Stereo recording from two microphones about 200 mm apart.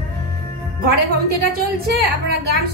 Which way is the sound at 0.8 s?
50° right (ahead or behind).